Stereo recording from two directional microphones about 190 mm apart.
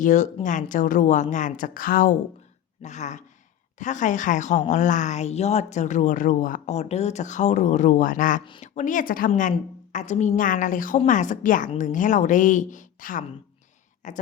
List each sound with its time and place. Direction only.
0.0 s a woman's voice: 40° left (ahead or behind)
8.4 s speech: 25° left (ahead or behind)
8.7 s a woman's voice: 40° left (ahead or behind)